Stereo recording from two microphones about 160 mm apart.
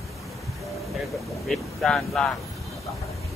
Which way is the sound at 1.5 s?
Centre (ahead or behind).